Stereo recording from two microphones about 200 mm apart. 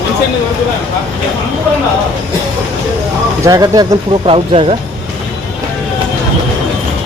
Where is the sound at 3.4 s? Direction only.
15° right (ahead or behind).